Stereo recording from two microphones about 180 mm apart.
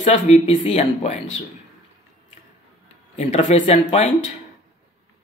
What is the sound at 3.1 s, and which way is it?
Speech, 40° left (ahead or behind).